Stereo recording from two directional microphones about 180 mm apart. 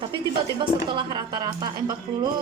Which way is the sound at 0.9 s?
25° right (ahead or behind).